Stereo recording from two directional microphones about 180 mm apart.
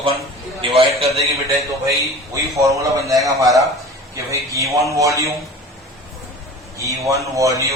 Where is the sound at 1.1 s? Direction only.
Centre (ahead or behind).